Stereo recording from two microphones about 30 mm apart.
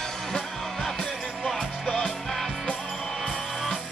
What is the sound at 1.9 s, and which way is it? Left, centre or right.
Music, left.